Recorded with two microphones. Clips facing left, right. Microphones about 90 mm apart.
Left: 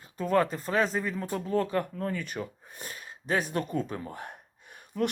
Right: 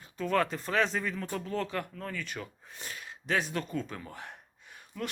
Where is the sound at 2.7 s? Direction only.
40° left (ahead or behind).